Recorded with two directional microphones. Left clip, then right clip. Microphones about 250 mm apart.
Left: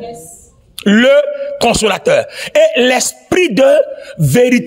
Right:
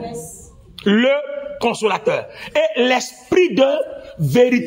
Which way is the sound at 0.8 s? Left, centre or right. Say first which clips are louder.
Left 7 dB; left.